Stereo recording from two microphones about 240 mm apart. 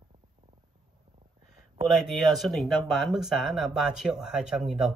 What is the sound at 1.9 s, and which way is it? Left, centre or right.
Speech, centre.